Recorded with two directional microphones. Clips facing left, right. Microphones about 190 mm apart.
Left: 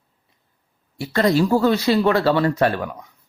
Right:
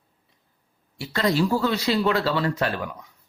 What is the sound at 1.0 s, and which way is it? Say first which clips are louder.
Speech: left 5 dB; 50° left (ahead or behind).